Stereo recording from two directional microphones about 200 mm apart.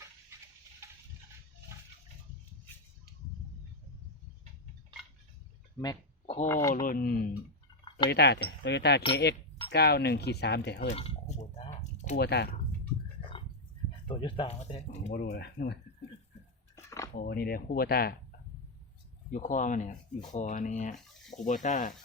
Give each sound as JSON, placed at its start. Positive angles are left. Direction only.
{"t": 5.8, "sound": "a sound", "side_deg": 20}
{"t": 6.4, "sound": "speech", "side_deg": 15}
{"t": 6.8, "sound": "speech", "side_deg": 45}
{"t": 8.1, "sound": "speech", "side_deg": 60}
{"t": 10.8, "sound": "a sound", "side_deg": 30}
{"t": 12.1, "sound": "speech", "side_deg": 55}
{"t": 14.1, "sound": "speech", "side_deg": 25}
{"t": 15.1, "sound": "speech", "side_deg": 50}
{"t": 16.7, "sound": "dishes", "side_deg": 15}
{"t": 17.2, "sound": "speech", "side_deg": 50}
{"t": 19.3, "sound": "speech", "side_deg": 40}